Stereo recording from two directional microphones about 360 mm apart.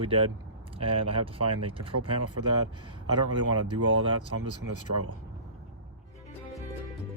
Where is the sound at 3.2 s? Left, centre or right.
Right.